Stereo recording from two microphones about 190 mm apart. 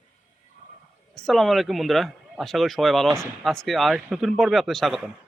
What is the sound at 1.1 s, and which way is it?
Speech, centre (ahead or behind).